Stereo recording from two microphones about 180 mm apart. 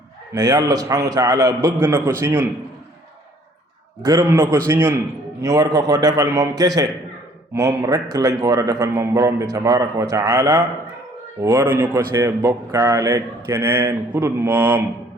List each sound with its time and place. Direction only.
0.3 s a man's voice: 20° right (ahead or behind)
4.0 s a man's voice: 20° right (ahead or behind)